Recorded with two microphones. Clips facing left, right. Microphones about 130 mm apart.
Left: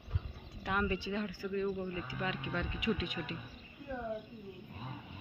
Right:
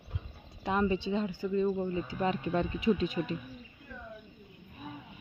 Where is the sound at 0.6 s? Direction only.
25° right (ahead or behind).